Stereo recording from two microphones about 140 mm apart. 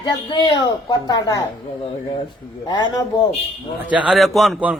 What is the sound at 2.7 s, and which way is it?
Speech, 30° left (ahead or behind).